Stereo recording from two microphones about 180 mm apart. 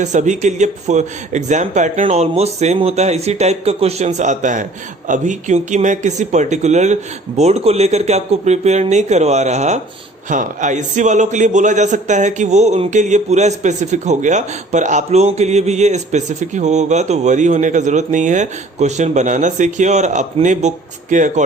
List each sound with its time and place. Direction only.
0.0 s a man's voice: 40° right (ahead or behind)